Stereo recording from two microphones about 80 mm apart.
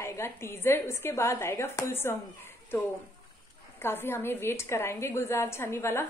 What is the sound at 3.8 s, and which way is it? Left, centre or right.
A woman's voice, left.